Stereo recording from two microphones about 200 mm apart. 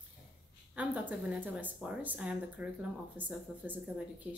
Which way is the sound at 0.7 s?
5° right (ahead or behind).